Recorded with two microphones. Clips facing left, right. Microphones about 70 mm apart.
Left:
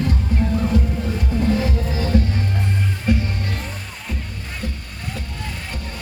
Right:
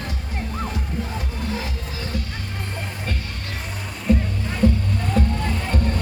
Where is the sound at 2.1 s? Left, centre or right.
Left.